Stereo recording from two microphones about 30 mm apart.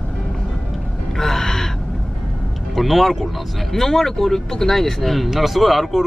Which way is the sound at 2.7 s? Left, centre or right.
Centre.